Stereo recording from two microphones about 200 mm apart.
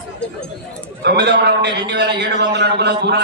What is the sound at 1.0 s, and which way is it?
A man's voice, 55° right (ahead or behind).